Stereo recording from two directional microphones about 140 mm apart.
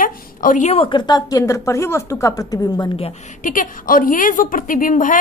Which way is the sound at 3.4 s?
70° left (ahead or behind).